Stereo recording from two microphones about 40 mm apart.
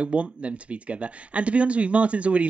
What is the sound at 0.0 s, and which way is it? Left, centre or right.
Speech, right.